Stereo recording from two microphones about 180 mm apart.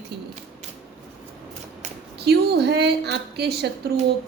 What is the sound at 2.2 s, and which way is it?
A woman's voice, 65° right (ahead or behind).